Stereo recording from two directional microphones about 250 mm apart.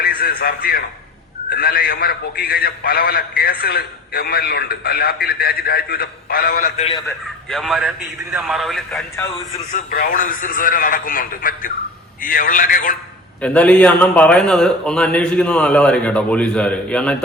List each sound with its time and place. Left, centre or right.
0.0 s a man's voice: left
7.5 s a man's voice: centre
9.7 s a man's voice: left
13.4 s a man's voice: centre